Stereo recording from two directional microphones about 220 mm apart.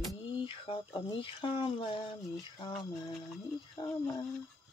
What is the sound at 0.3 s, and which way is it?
Speech, 25° left (ahead or behind).